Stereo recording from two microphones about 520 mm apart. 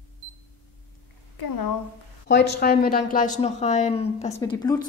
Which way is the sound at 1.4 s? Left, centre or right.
Left.